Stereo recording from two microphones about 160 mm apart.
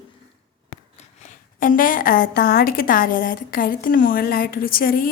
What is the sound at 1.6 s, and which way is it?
A woman's voice, 60° left (ahead or behind).